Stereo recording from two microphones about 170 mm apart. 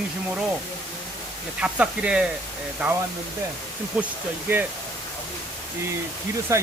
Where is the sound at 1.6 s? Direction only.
5° right (ahead or behind).